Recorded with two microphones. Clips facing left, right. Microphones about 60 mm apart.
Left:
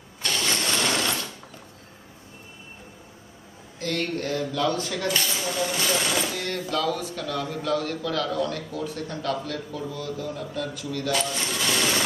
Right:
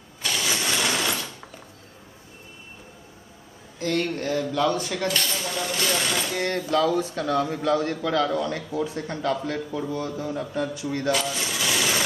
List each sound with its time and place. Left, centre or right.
0.2 s mechanisms: centre
3.8 s speech: right
5.0 s a sound: centre
6.4 s a man's voice: right
11.1 s coin: centre